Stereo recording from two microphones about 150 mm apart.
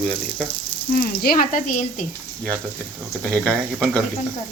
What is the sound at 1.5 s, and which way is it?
Speech, 60° left (ahead or behind).